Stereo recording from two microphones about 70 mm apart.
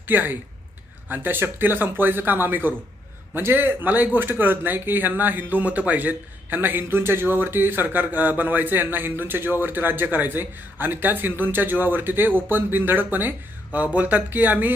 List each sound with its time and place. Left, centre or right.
0.1 s speech: right